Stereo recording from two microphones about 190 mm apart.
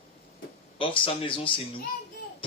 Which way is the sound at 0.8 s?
25° left (ahead or behind).